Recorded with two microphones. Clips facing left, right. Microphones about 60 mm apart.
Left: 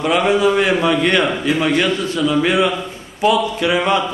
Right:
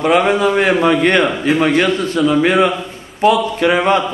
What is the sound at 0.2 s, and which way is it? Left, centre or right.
A man's voice, right.